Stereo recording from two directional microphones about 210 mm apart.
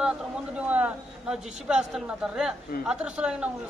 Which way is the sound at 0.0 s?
5° right (ahead or behind).